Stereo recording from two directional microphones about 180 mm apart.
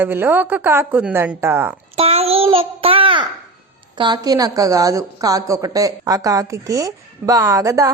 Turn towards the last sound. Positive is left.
turn(degrees=-20)  # may be behind; listen again after turning